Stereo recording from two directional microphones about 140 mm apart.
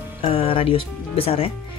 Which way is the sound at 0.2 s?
40° left (ahead or behind).